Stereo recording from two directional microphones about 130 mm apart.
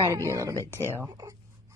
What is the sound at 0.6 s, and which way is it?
Speech, 20° left (ahead or behind).